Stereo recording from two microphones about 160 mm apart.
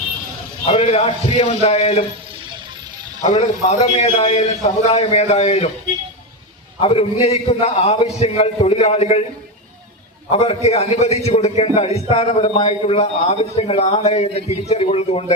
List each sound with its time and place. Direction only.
0.6 s a man's voice: 40° left (ahead or behind)
3.2 s a man's voice: 45° left (ahead or behind)
6.8 s a man's voice: 40° left (ahead or behind)
10.3 s a man's voice: 40° left (ahead or behind)